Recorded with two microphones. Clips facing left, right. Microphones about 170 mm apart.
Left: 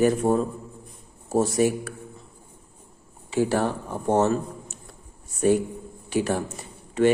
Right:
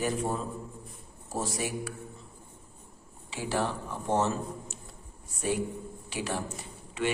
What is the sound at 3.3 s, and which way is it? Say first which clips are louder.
A man's voice: left 8 dB; 50° left (ahead or behind).